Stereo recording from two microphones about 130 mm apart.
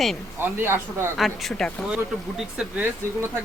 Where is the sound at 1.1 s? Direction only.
Centre (ahead or behind).